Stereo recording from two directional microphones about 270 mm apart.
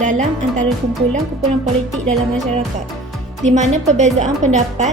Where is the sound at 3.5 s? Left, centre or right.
Right.